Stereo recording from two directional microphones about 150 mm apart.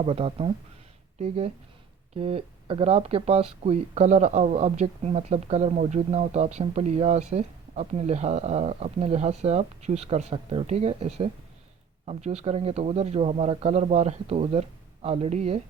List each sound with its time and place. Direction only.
0.0 s speech: 40° right (ahead or behind)
2.1 s speech: 40° right (ahead or behind)